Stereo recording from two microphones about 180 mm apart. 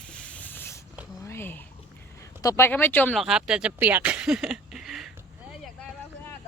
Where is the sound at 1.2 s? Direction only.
15° left (ahead or behind).